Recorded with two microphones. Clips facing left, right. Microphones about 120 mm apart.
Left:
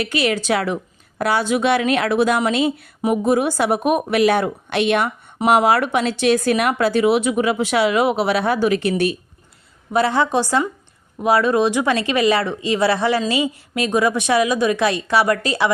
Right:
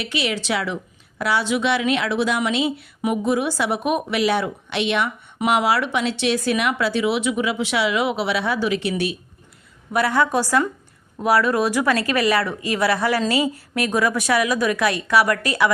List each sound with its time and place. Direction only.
0.0 s speech: 50° left (ahead or behind)
9.9 s a woman's voice: 25° left (ahead or behind)